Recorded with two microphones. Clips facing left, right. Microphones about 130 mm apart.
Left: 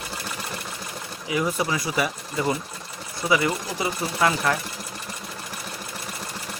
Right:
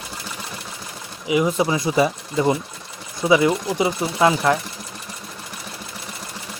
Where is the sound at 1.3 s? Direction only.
20° right (ahead or behind).